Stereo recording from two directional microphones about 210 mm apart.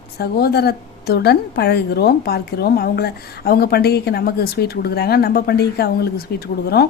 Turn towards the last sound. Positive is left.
turn(degrees=50)  # may be behind; listen again after turning